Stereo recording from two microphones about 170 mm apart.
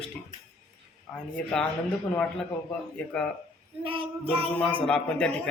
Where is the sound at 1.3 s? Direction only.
10° left (ahead or behind).